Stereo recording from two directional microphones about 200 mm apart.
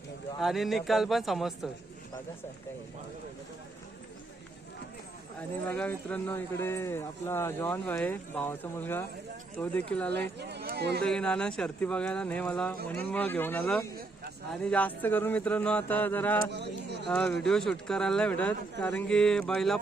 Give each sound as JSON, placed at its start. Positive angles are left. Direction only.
{"t": 0.3, "sound": "speech", "side_deg": 0}
{"t": 5.4, "sound": "speech", "side_deg": 10}
{"t": 10.2, "sound": "speech", "side_deg": -55}
{"t": 11.0, "sound": "speech", "side_deg": 5}
{"t": 16.5, "sound": "speech", "side_deg": -60}
{"t": 17.1, "sound": "speech", "side_deg": 5}